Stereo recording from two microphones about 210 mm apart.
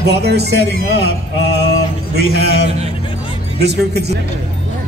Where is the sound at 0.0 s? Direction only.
50° right (ahead or behind).